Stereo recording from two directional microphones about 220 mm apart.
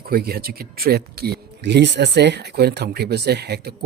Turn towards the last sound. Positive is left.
turn(degrees=-45)  # may be behind; listen again after turning